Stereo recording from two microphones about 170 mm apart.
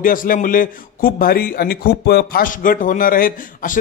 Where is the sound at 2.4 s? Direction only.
55° left (ahead or behind).